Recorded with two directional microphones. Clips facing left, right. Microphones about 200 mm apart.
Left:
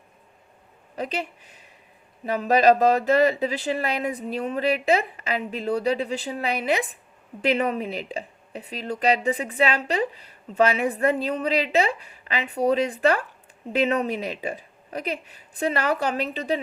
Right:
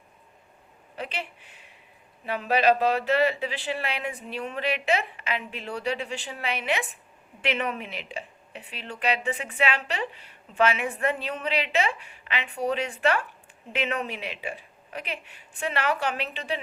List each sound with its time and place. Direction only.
0.9 s speech: 40° left (ahead or behind)